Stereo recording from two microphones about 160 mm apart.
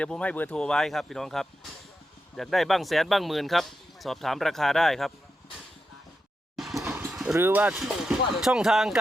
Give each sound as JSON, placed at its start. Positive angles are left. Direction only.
{"t": 0.0, "sound": "speech", "side_deg": 5}
{"t": 6.7, "sound": "a sound", "side_deg": -20}
{"t": 7.1, "sound": "vehicle", "side_deg": 0}
{"t": 7.3, "sound": "speech", "side_deg": -15}